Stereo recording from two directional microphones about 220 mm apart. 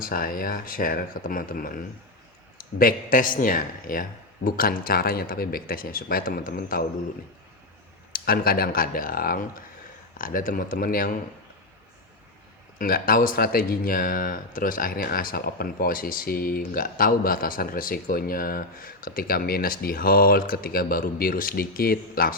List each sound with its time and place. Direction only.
0.0 s speech: 40° left (ahead or behind)
8.1 s speech: 40° left (ahead or behind)
12.8 s speech: 40° left (ahead or behind)